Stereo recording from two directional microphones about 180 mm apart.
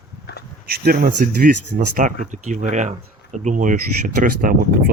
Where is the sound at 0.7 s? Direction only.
55° right (ahead or behind).